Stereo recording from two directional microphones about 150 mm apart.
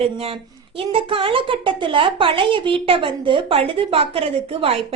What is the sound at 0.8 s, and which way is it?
A woman's voice, 35° right (ahead or behind).